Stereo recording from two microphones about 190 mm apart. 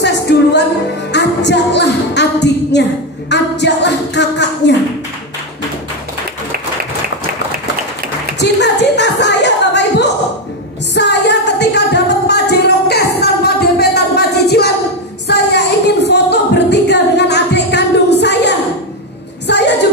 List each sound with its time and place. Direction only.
0.0 s music: 65° left (ahead or behind)
8.4 s music: 65° left (ahead or behind)
15.2 s a sound: 65° left (ahead or behind)
19.5 s music: 60° left (ahead or behind)